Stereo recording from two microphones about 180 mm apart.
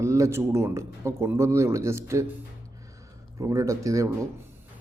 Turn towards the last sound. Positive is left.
turn(degrees=-20)  # may be behind; listen again after turning